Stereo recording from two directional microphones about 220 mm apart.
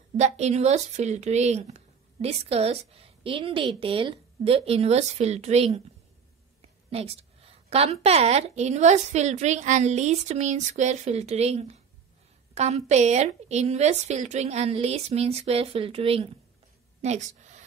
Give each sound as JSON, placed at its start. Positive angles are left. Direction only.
{"t": 0.2, "sound": "a woman's voice", "side_deg": -30}
{"t": 6.9, "sound": "a woman's voice", "side_deg": -25}